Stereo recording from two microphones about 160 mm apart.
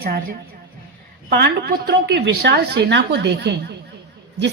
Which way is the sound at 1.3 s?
90° right.